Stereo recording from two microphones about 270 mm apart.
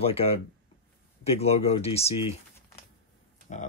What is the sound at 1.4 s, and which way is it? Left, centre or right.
Speech, left.